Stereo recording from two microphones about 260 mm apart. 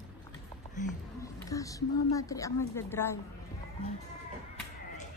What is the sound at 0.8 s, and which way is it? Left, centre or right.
Speech, left.